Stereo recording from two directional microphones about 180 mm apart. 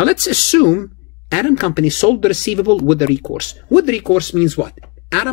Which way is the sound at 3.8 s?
35° left (ahead or behind).